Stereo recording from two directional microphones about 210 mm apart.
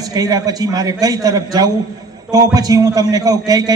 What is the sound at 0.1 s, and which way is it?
A man's voice, 15° right (ahead or behind).